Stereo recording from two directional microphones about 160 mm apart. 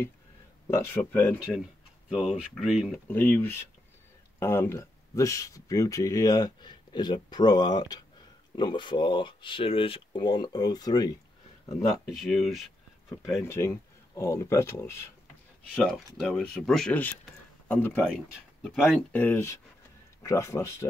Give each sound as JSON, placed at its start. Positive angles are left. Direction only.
{"t": 0.7, "sound": "speech", "side_deg": 15}
{"t": 1.4, "sound": "speech", "side_deg": -5}
{"t": 3.1, "sound": "speech", "side_deg": 10}
{"t": 12.1, "sound": "speech", "side_deg": 0}
{"t": 13.4, "sound": "speech", "side_deg": 15}
{"t": 15.7, "sound": "speech", "side_deg": 0}